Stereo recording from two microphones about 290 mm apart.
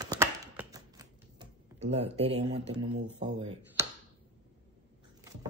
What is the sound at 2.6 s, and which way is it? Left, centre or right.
Speech, right.